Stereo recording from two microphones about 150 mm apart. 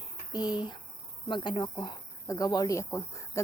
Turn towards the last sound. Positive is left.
turn(degrees=20)  # may be behind; listen again after turning